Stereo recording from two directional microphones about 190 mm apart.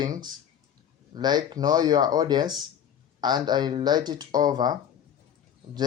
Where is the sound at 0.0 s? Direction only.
20° right (ahead or behind).